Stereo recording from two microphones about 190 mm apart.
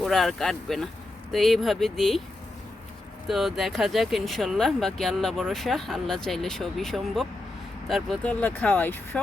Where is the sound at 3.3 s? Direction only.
Centre (ahead or behind).